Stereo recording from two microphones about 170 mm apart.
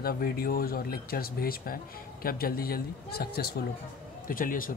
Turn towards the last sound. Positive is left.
turn(degrees=55)  # may be behind; listen again after turning